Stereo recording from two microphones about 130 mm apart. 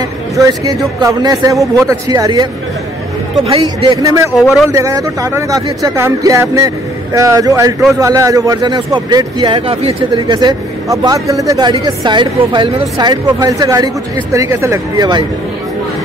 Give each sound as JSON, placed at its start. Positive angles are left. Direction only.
{"t": 0.5, "sound": "speech", "side_deg": -30}
{"t": 4.0, "sound": "speech", "side_deg": -25}
{"t": 4.4, "sound": "speech", "side_deg": -5}
{"t": 4.6, "sound": "speech", "side_deg": -25}
{"t": 9.7, "sound": "speech", "side_deg": -50}
{"t": 10.2, "sound": "speech", "side_deg": -30}